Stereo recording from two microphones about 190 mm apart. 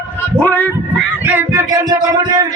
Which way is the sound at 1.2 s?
10° right (ahead or behind).